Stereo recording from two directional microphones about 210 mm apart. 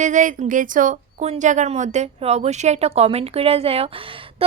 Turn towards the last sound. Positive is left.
turn(degrees=-25)  # may be behind; listen again after turning